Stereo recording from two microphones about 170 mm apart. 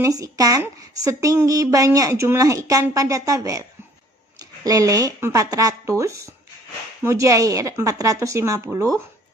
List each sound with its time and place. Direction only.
0.0 s a woman's voice: 20° right (ahead or behind)